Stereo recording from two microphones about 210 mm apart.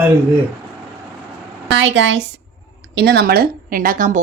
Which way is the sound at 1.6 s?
60° right (ahead or behind).